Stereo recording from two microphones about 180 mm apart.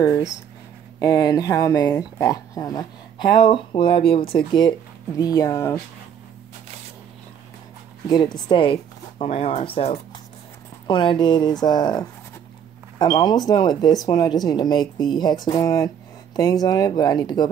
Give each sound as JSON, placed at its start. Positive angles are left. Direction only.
{"t": 0.0, "sound": "speech", "side_deg": 20}
{"t": 8.5, "sound": "speech", "side_deg": 30}